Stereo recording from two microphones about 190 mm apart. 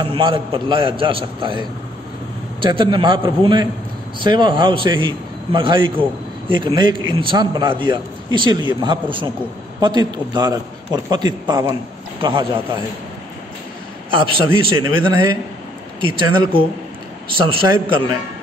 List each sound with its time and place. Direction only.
0.0 s a man's voice: 25° right (ahead or behind)
14.1 s a man's voice: 25° right (ahead or behind)